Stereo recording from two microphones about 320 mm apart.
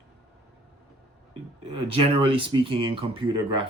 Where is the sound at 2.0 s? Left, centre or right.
Centre.